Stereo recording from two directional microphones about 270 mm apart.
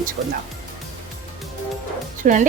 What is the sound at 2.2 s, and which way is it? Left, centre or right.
Speech, right.